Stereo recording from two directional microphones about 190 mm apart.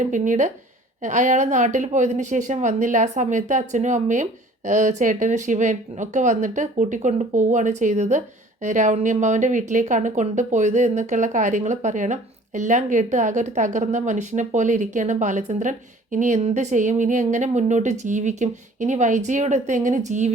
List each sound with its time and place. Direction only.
0.0 s speech: 40° right (ahead or behind)